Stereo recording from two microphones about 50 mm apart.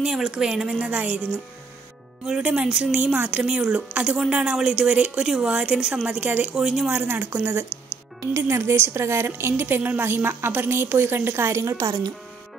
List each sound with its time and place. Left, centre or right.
0.0 s a woman's voice: centre
2.5 s a woman's voice: centre
3.2 s a woman's voice: right
3.4 s a woman's voice: centre
6.0 s a woman's voice: right
6.5 s a woman's voice: centre
6.9 s a woman's voice: right
8.3 s a woman's voice: right
9.8 s a woman's voice: right
10.0 s a woman's voice: right